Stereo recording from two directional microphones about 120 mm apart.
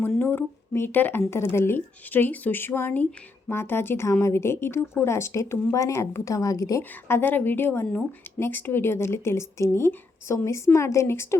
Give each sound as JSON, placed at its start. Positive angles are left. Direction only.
{"t": 0.0, "sound": "a woman's voice", "side_deg": 15}
{"t": 6.9, "sound": "a woman's voice", "side_deg": 15}